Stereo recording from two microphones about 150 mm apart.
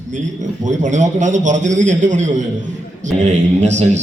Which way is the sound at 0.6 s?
55° right (ahead or behind).